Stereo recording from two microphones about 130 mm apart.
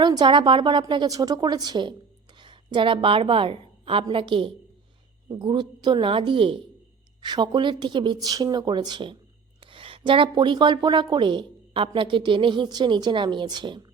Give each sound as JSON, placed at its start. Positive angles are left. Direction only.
{"t": 0.0, "sound": "a woman's voice", "side_deg": -35}